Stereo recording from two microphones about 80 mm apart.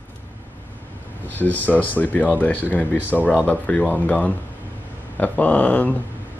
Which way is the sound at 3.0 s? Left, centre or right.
Centre.